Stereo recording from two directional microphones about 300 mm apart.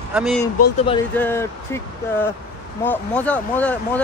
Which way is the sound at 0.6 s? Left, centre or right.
Left.